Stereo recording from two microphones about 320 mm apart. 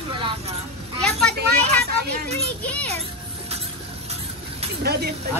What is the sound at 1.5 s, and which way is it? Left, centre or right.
Speech, right.